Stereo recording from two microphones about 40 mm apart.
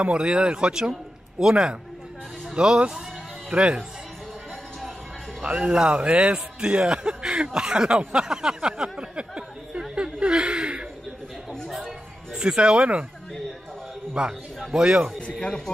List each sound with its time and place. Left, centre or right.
0.0 s a man's voice: right
5.4 s a man's voice: right
8.1 s a sound: centre
10.2 s chuckle: right
12.4 s a man's voice: right
14.2 s a man's voice: centre
15.4 s speech: centre